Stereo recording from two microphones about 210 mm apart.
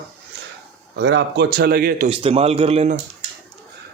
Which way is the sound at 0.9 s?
55° right (ahead or behind).